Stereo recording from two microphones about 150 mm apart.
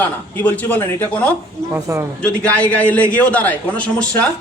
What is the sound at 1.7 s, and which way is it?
Speech, 15° right (ahead or behind).